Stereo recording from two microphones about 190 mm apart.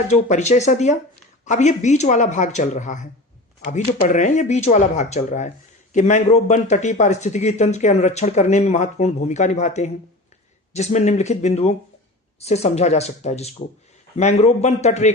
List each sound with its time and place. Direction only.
0.1 s a man's voice: 40° left (ahead or behind)